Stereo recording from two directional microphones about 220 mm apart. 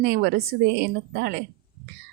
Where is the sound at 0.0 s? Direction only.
50° right (ahead or behind).